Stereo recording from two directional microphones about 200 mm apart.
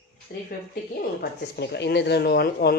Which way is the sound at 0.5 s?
50° left (ahead or behind).